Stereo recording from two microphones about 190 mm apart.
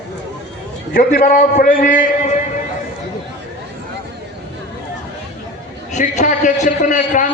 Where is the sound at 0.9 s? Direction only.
45° left (ahead or behind).